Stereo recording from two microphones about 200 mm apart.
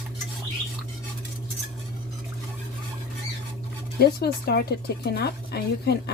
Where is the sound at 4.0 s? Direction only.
50° left (ahead or behind).